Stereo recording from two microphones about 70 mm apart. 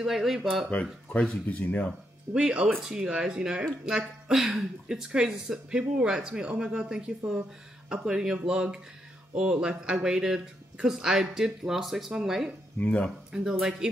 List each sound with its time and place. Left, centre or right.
0.0 s speech: centre
1.0 s speech: centre
2.3 s speech: centre
12.8 s speech: centre
13.3 s speech: centre